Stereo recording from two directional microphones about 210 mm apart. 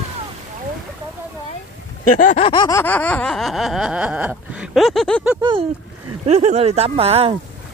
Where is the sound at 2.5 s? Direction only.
15° left (ahead or behind).